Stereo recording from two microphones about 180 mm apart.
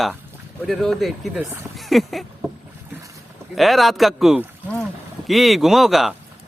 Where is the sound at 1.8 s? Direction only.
Centre (ahead or behind).